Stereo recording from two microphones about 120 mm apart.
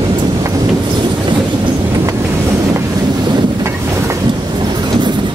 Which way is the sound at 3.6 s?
25° right (ahead or behind).